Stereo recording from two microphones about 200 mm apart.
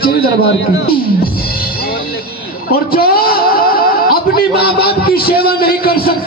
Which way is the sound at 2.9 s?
50° left (ahead or behind).